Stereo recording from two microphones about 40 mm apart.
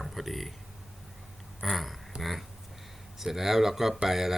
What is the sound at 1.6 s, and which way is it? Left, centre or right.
Speech, centre.